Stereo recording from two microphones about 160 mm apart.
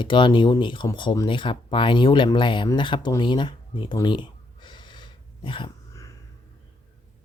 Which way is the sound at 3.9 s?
30° left (ahead or behind).